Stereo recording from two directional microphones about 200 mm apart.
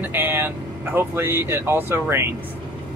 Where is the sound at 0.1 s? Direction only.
10° right (ahead or behind).